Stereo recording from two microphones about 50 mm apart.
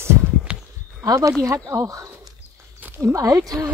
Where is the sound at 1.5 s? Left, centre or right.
Right.